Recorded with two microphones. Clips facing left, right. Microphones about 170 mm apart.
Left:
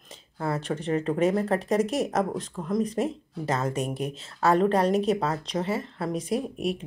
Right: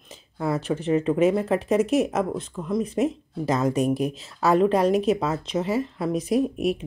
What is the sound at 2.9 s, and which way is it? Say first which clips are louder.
Speech: right 4 dB; 35° left (ahead or behind).